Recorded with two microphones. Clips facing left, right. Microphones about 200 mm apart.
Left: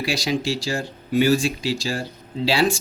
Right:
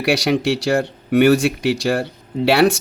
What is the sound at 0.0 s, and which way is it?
Speech, 65° right (ahead or behind).